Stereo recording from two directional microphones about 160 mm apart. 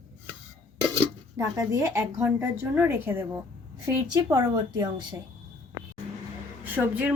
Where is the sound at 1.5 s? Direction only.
20° right (ahead or behind).